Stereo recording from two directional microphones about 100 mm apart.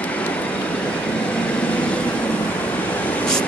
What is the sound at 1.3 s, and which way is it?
Vehicle, 10° left (ahead or behind).